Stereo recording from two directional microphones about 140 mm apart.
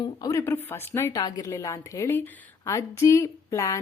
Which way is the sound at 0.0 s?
25° left (ahead or behind).